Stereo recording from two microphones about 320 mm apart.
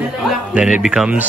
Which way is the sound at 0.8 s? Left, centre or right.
Centre.